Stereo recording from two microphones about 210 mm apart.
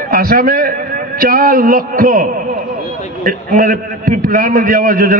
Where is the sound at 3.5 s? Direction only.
40° right (ahead or behind).